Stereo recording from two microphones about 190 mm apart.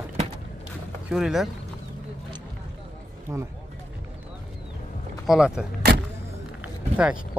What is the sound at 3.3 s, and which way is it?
Speech, 15° right (ahead or behind).